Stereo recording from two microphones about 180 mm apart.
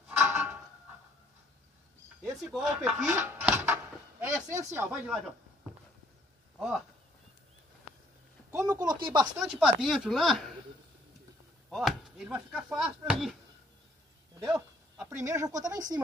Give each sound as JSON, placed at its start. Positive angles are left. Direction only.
{"t": 0.2, "sound": "a sound", "side_deg": -10}
{"t": 2.2, "sound": "chopping", "side_deg": 0}
{"t": 2.9, "sound": "speech", "side_deg": -10}
{"t": 8.5, "sound": "a man's voice", "side_deg": -20}
{"t": 9.4, "sound": "chopping", "side_deg": 0}
{"t": 11.7, "sound": "chopping", "side_deg": 0}
{"t": 15.0, "sound": "speech", "side_deg": -15}